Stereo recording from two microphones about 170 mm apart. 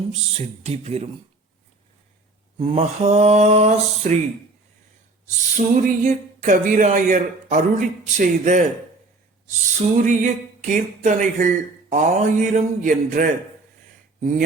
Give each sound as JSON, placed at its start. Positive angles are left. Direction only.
{"t": 0.1, "sound": "mantra", "side_deg": -40}
{"t": 2.6, "sound": "mantra", "side_deg": -40}
{"t": 5.5, "sound": "speech", "side_deg": -45}